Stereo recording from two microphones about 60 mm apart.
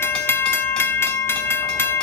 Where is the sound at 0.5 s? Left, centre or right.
Left.